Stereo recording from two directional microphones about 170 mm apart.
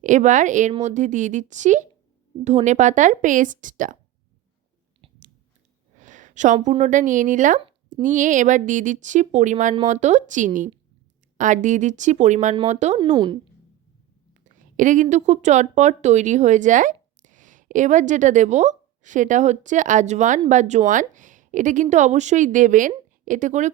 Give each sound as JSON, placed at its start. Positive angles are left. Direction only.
{"t": 0.0, "sound": "a woman's voice", "side_deg": -45}
{"t": 6.0, "sound": "a woman's voice", "side_deg": -45}
{"t": 13.1, "sound": "a woman's voice", "side_deg": -25}
{"t": 14.4, "sound": "a woman's voice", "side_deg": -50}